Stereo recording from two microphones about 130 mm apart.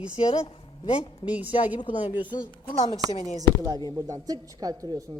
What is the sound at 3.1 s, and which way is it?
Speech, 65° left (ahead or behind).